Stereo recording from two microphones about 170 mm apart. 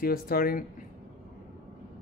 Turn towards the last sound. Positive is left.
turn(degrees=60)  # may be behind; listen again after turning